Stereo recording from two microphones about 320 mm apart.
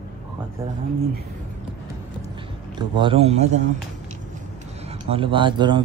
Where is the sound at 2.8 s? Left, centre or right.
Centre.